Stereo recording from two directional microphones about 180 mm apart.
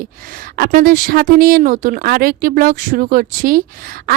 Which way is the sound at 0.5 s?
55° right (ahead or behind).